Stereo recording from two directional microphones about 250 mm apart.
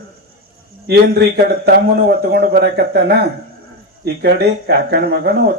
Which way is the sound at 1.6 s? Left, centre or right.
Right.